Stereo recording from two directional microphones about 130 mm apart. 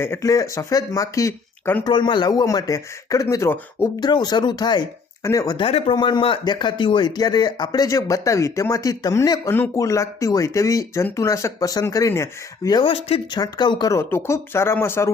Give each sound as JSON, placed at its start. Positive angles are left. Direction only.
{"t": 0.0, "sound": "speech", "side_deg": 20}
{"t": 1.8, "sound": "speech", "side_deg": 40}
{"t": 4.0, "sound": "speech", "side_deg": 30}
{"t": 5.5, "sound": "speech", "side_deg": 45}
{"t": 12.8, "sound": "speech", "side_deg": 45}
{"t": 13.3, "sound": "speech", "side_deg": 35}